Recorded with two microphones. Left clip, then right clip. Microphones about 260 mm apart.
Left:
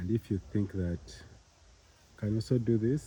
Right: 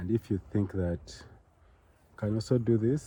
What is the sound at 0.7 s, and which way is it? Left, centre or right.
Speech, right.